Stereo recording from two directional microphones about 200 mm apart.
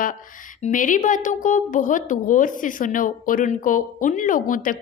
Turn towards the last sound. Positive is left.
turn(degrees=40)  # may be behind; listen again after turning